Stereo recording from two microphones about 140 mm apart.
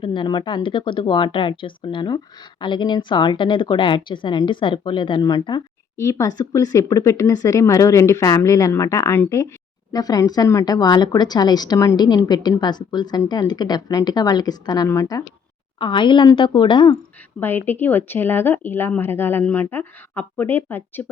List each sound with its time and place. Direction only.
0.0 s a woman's voice: 35° left (ahead or behind)
17.4 s speech: 15° left (ahead or behind)